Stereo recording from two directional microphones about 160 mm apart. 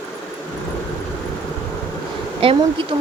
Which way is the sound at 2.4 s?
35° right (ahead or behind).